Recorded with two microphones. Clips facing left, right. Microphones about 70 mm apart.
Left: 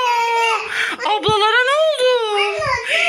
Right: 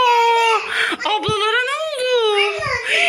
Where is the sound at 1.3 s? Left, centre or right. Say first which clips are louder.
Left 6 dB; left.